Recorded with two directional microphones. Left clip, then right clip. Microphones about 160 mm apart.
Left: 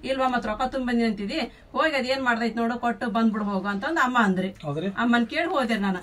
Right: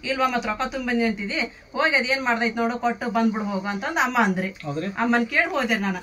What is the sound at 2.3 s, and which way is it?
Speech, 10° right (ahead or behind).